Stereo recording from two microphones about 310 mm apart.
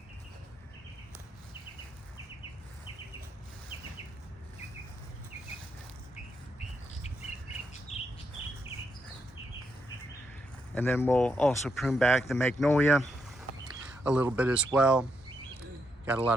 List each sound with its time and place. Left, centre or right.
7.9 s bird: centre
10.8 s speech: centre
14.0 s speech: centre
16.0 s a man's voice: centre